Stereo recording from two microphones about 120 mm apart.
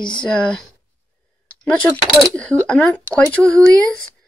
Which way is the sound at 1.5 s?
10° left (ahead or behind).